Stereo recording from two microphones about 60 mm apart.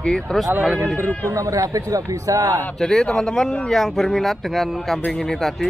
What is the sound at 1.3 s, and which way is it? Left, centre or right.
A man's voice, right.